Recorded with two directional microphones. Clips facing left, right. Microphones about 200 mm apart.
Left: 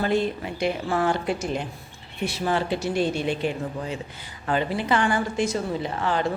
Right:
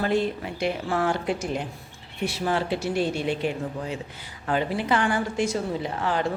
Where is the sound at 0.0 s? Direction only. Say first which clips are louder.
Left 1 dB; centre (ahead or behind).